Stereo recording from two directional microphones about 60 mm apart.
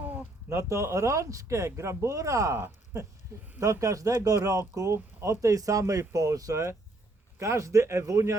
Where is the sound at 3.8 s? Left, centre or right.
Right.